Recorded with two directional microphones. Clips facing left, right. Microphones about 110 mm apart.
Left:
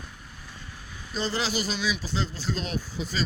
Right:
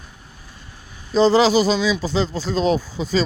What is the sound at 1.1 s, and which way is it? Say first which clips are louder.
Speech: right 15 dB; 90° right.